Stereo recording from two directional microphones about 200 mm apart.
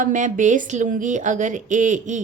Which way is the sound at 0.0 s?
40° right (ahead or behind).